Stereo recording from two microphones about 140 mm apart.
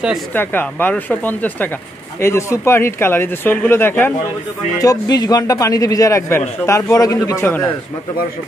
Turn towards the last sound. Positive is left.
turn(degrees=20)  # may be behind; listen again after turning